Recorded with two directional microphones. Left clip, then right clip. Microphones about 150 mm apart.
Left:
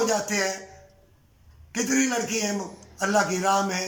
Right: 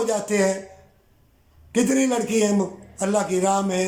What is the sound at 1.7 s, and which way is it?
A man's voice, 25° right (ahead or behind).